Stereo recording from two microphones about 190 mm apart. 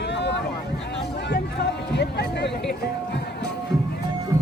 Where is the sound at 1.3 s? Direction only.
60° left (ahead or behind).